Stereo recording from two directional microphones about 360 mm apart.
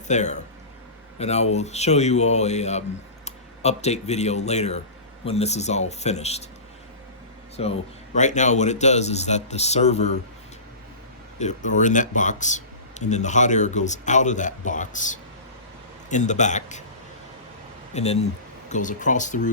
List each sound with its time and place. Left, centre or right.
0.1 s speech: centre
7.5 s speech: centre
11.3 s speech: centre
17.9 s speech: centre